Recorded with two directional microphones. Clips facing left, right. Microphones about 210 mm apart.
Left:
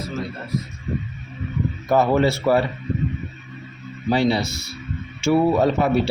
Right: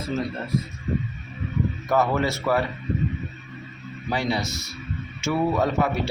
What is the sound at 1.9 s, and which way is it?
Speech, 30° left (ahead or behind).